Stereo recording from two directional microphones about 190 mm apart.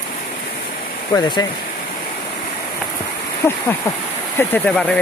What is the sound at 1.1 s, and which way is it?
Speech, 15° left (ahead or behind).